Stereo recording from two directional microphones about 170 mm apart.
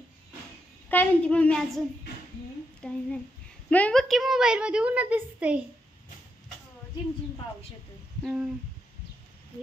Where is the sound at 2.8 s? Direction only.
5° left (ahead or behind).